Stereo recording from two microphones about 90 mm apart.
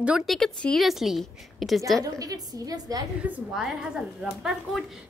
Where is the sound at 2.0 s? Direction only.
40° right (ahead or behind).